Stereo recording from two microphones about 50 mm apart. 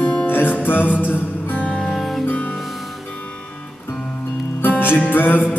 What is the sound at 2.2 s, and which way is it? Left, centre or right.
Music, left.